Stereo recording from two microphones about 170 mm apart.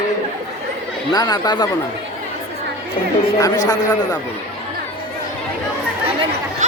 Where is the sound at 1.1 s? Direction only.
25° left (ahead or behind).